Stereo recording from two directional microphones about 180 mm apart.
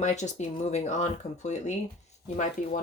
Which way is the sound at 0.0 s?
40° left (ahead or behind).